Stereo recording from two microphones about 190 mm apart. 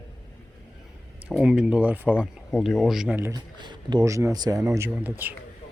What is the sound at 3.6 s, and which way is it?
Speech, 25° right (ahead or behind).